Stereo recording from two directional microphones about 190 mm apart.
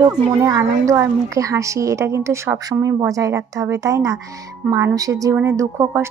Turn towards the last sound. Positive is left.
turn(degrees=-15)  # may be behind; listen again after turning